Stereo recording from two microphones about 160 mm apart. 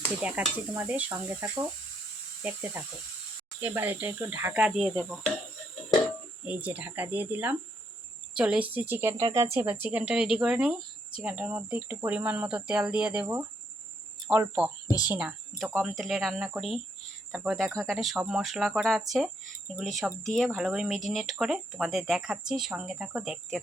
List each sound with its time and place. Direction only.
0.2 s speech: 10° right (ahead or behind)
6.4 s speech: 10° right (ahead or behind)
14.8 s speech: 25° left (ahead or behind)
15.8 s speech: centre (ahead or behind)